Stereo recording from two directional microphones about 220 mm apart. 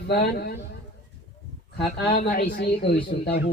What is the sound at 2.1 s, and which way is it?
Speech, 40° left (ahead or behind).